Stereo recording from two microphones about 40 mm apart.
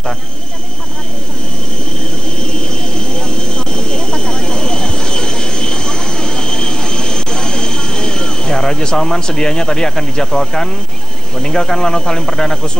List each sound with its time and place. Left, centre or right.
2.4 s vehicle: left
11.3 s speech: centre